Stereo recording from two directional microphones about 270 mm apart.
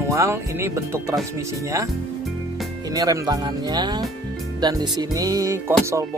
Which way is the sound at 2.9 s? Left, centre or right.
Centre.